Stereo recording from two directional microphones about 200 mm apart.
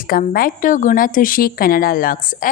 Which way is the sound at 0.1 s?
45° left (ahead or behind).